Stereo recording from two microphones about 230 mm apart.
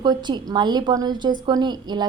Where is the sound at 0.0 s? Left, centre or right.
Centre.